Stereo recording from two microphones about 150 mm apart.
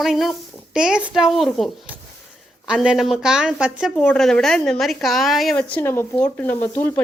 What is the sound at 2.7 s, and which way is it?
Speech, 5° right (ahead or behind).